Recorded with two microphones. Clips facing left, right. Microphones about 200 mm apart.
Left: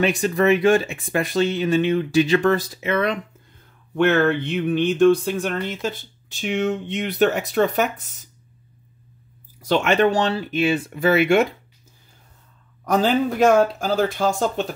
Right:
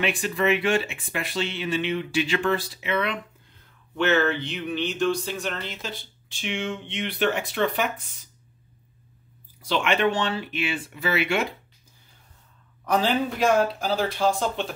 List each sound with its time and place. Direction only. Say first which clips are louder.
0.0 s speech: left 6 dB; 40° left (ahead or behind)
3.9 s speech: left 5 dB; 55° left (ahead or behind)
9.6 s speech: left 6 dB; 45° left (ahead or behind)
12.8 s speech: left 4 dB; 45° left (ahead or behind)